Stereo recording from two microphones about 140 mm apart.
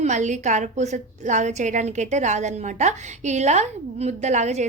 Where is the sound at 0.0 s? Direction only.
55° right (ahead or behind).